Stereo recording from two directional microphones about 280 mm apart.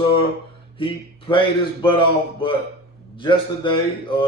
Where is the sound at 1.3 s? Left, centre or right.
Centre.